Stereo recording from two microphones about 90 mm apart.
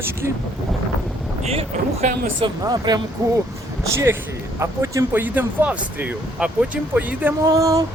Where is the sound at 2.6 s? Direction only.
50° right (ahead or behind); by 7.3 s 20° right (ahead or behind).